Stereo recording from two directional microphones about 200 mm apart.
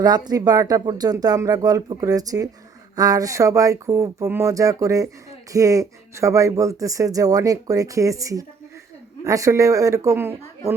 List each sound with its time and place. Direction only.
0.0 s speech: 20° right (ahead or behind)